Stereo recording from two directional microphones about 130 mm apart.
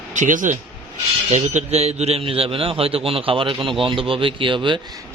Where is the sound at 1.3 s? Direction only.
65° right (ahead or behind); by 4.8 s 40° right (ahead or behind).